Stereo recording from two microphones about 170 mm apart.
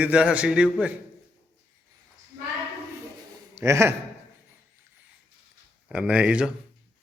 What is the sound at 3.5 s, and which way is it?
Speech, 15° right (ahead or behind).